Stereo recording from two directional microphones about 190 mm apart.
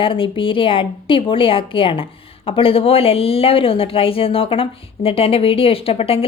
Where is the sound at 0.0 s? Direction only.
25° left (ahead or behind).